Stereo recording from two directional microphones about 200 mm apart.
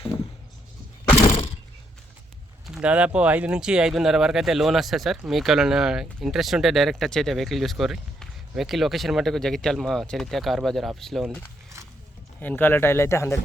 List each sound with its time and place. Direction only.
2.6 s speech: 5° right (ahead or behind); by 13.3 s 15° left (ahead or behind)